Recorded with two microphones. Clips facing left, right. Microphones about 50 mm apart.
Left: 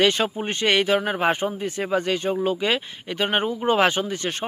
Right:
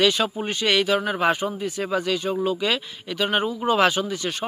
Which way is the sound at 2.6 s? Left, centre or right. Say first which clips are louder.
Left 1 dB; left.